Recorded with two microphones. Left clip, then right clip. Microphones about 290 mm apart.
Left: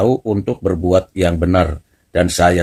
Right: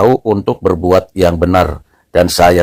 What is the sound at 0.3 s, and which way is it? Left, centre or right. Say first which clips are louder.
Speech: right 6 dB; centre.